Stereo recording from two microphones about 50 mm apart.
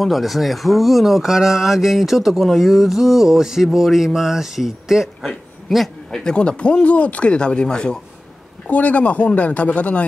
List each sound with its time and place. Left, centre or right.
0.0 s speech: centre
6.1 s speech: centre
8.6 s speech: left